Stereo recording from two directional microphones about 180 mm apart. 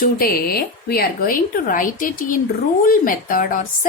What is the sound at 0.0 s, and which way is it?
Speech, 55° left (ahead or behind).